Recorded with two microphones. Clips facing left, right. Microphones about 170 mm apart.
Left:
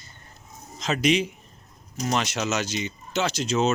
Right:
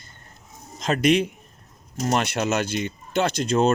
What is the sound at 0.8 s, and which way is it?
Speech, 55° right (ahead or behind).